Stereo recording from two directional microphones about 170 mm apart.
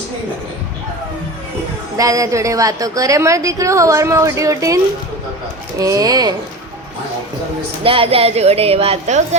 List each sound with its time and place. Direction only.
2.0 s a woman's voice: 20° right (ahead or behind)
5.8 s a woman's voice: 20° right (ahead or behind)
7.9 s speech: 35° right (ahead or behind)